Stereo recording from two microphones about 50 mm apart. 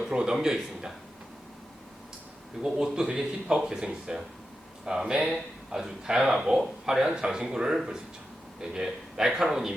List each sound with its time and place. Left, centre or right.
0.0 s a man's voice: centre
2.7 s a man's voice: centre